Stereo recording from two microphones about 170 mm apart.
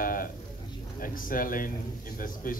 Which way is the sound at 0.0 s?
55° left (ahead or behind).